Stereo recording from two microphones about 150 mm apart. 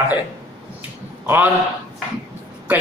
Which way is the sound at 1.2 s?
15° right (ahead or behind).